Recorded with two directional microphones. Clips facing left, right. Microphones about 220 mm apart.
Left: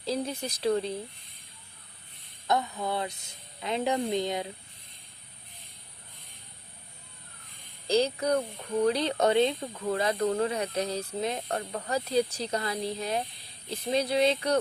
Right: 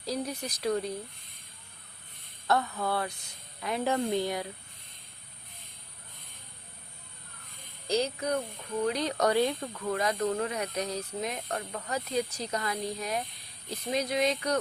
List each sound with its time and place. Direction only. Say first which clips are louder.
0.0 s speech: left 2 dB; 25° left (ahead or behind)
2.5 s speech: even; 15° left (ahead or behind)
7.9 s speech: left 4 dB; 30° left (ahead or behind)